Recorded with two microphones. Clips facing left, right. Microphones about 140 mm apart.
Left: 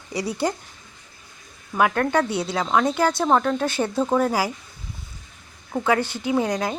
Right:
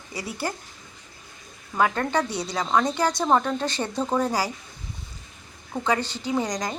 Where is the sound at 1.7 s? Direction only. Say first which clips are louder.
Left 3 dB; 5° left (ahead or behind).